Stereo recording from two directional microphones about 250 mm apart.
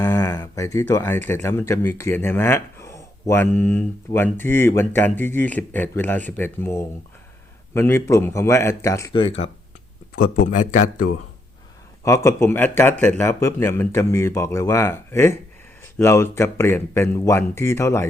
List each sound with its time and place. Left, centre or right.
0.0 s speech: centre
10.2 s speech: left
12.0 s speech: centre